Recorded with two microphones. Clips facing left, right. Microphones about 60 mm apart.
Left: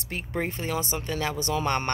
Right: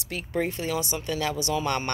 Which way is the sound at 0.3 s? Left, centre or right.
Left.